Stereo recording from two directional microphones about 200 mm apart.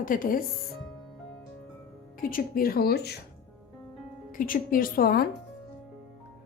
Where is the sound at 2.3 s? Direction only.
45° left (ahead or behind).